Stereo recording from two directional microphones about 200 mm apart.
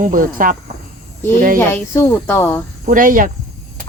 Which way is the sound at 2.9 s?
45° right (ahead or behind).